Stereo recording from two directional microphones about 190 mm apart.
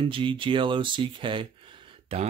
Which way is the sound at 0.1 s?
25° right (ahead or behind).